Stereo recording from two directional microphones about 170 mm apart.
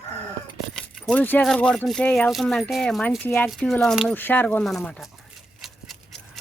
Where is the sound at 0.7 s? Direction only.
5° left (ahead or behind).